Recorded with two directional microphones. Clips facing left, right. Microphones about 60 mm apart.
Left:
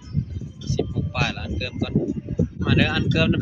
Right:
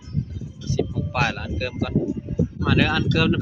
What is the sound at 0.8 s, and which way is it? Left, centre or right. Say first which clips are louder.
Speech: right 2 dB; centre.